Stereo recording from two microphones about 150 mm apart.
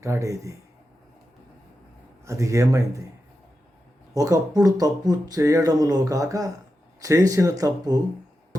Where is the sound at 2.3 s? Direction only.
20° right (ahead or behind).